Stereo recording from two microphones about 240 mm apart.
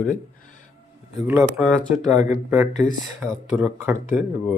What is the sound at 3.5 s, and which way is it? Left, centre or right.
Speech, centre.